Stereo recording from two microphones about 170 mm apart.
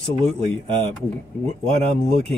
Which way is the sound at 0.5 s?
30° right (ahead or behind).